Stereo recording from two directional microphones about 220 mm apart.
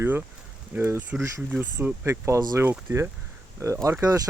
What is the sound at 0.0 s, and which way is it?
Speech, 10° right (ahead or behind).